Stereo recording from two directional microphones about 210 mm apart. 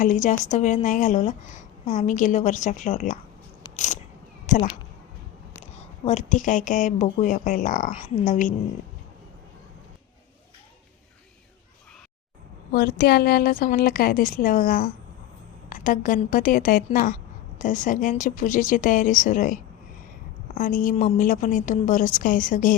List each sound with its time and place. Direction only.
0.0 s a woman's voice: 35° left (ahead or behind)
3.8 s a sound: 35° left (ahead or behind)
5.7 s a woman's voice: 30° left (ahead or behind)
12.7 s a woman's voice: 45° left (ahead or behind)